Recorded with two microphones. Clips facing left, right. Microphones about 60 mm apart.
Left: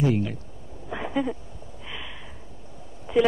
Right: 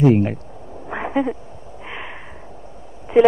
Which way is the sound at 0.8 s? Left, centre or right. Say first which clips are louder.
Right 6 dB; right.